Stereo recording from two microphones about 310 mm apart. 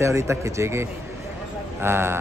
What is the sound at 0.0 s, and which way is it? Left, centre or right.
Speech, centre.